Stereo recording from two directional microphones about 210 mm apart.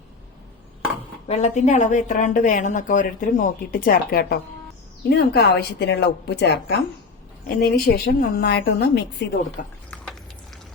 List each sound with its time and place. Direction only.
1.3 s a woman's voice: 30° left (ahead or behind); by 9.6 s 50° left (ahead or behind)